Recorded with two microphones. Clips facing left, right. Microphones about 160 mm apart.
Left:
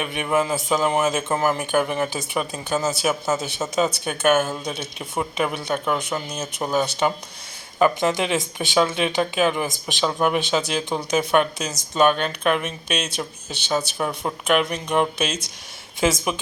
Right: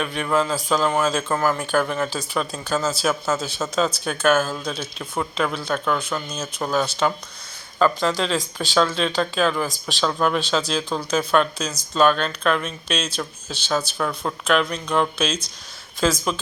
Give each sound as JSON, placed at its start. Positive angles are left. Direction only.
{"t": 0.0, "sound": "speech", "side_deg": 15}